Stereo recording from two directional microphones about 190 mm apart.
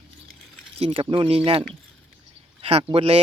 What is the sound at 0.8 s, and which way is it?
Speech, 30° right (ahead or behind).